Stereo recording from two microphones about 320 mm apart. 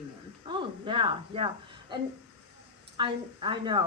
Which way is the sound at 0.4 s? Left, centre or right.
Centre.